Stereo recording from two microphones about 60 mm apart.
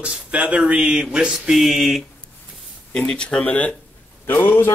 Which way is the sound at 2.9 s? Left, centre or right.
Centre.